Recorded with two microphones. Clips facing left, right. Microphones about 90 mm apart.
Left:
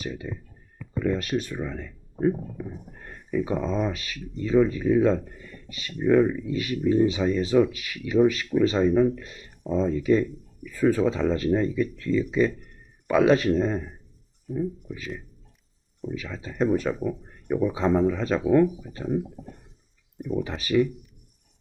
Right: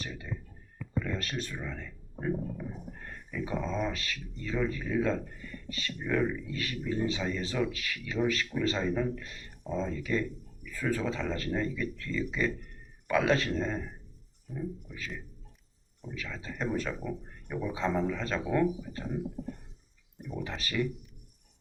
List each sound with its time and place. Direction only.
0.0 s speech: 15° left (ahead or behind)
16.1 s speech: 15° left (ahead or behind)
20.6 s speech: 15° left (ahead or behind)